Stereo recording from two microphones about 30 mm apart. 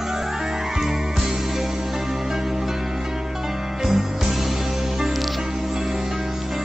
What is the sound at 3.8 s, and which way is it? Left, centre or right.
Music, centre.